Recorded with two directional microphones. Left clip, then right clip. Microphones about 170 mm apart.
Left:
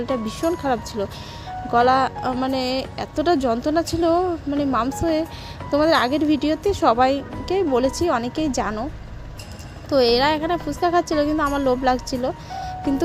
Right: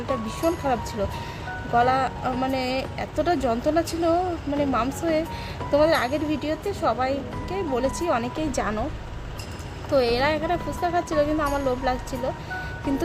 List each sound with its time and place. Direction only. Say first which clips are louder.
0.3 s speech: even; 30° left (ahead or behind)
9.9 s speech: left 4 dB; 30° left (ahead or behind)